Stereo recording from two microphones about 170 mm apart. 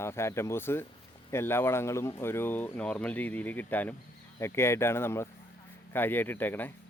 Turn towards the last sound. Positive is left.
turn(degrees=10)  # may be behind; listen again after turning